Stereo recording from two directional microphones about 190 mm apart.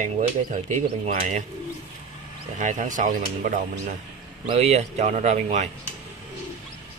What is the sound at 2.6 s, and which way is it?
Speech, 40° right (ahead or behind).